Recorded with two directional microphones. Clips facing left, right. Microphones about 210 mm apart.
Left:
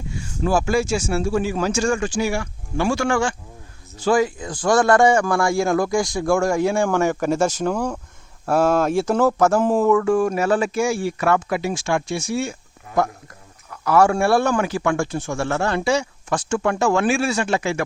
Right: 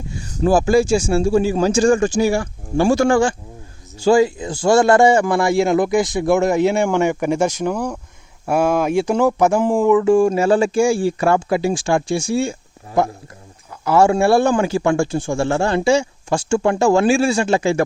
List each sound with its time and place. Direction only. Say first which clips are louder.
0.3 s speech: right 5 dB; 35° right (ahead or behind)